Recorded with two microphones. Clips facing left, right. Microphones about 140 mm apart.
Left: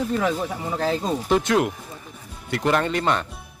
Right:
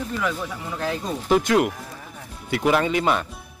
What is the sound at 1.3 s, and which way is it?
Speech, centre (ahead or behind).